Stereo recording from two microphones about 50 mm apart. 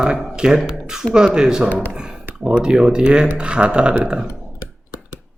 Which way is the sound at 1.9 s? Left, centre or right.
Centre.